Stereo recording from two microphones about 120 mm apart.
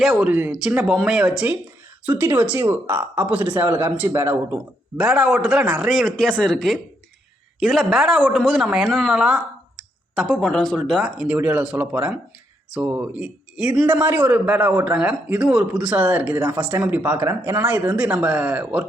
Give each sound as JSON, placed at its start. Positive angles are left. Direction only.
{"t": 0.2, "sound": "speech", "side_deg": -15}
{"t": 4.9, "sound": "speech", "side_deg": -10}
{"t": 13.9, "sound": "speech", "side_deg": -20}